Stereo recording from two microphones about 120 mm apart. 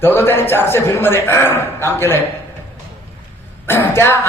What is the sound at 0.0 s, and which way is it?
A man's voice, 20° left (ahead or behind).